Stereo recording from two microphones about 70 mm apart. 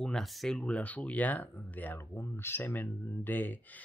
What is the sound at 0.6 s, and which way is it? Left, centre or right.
Speech, centre.